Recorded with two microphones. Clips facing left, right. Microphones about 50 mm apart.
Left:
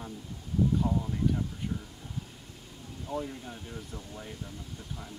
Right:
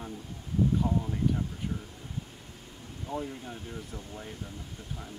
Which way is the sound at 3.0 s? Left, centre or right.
Centre.